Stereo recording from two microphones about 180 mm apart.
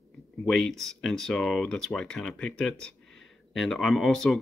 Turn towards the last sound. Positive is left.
turn(degrees=0)  # may be behind; listen again after turning